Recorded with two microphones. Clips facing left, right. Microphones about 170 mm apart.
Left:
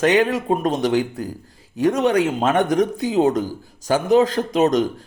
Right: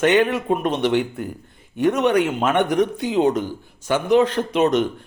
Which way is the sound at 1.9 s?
30° left (ahead or behind).